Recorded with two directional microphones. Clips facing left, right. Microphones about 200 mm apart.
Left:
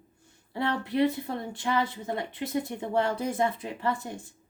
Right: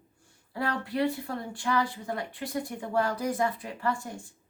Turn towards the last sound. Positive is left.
turn(degrees=20)  # may be behind; listen again after turning